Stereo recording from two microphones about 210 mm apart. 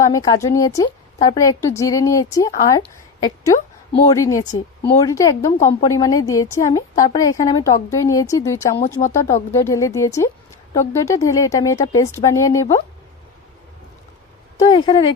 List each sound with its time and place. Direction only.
0.0 s a woman's voice: 15° left (ahead or behind)
14.6 s speech: 20° left (ahead or behind)